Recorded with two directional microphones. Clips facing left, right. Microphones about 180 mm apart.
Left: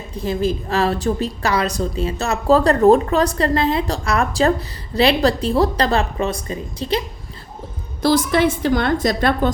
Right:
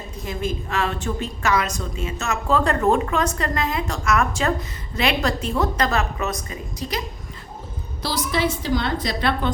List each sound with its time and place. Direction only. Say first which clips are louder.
0.2 s a woman's voice: left 7 dB; 30° left (ahead or behind)
8.0 s a woman's voice: left 8 dB; 50° left (ahead or behind)